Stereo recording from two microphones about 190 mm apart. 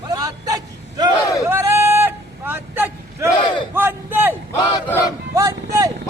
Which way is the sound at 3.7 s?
10° right (ahead or behind).